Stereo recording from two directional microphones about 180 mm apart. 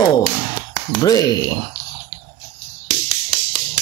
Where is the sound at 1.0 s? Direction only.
20° left (ahead or behind).